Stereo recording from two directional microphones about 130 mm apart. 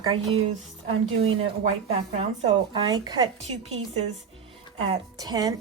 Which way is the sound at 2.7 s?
35° right (ahead or behind).